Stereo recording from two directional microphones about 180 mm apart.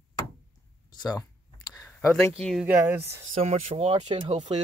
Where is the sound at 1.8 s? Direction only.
10° left (ahead or behind).